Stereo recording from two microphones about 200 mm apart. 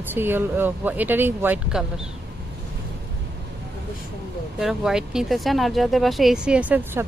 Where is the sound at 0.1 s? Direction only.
10° right (ahead or behind).